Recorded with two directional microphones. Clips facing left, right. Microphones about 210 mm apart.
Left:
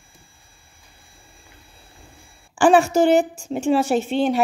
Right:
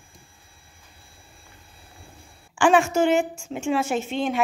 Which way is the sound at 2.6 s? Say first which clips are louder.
Left 4 dB; 35° left (ahead or behind).